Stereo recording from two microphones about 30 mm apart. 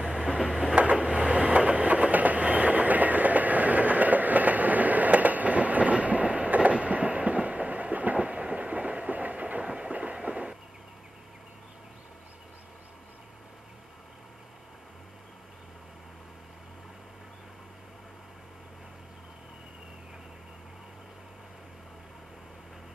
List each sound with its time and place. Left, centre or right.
0.0 s vehicle: centre
0.9 s train: right
8.2 s train: right
9.6 s train: right